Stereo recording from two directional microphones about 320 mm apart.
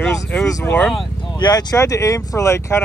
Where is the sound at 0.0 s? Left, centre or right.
Centre.